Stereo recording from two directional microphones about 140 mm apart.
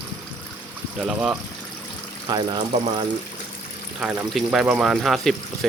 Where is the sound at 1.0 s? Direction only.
5° right (ahead or behind).